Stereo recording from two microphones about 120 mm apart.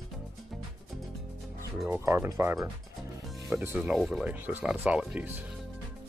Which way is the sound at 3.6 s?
15° right (ahead or behind).